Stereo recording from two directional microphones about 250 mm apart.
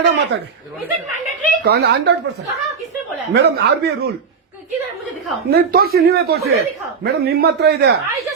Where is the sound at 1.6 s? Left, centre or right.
Right.